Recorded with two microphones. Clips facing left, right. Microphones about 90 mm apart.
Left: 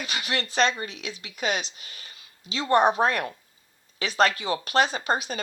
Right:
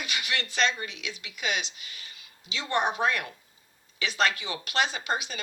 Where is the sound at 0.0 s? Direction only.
35° left (ahead or behind).